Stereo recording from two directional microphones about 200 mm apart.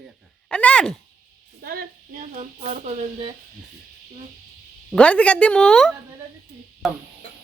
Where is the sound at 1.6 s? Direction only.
45° right (ahead or behind).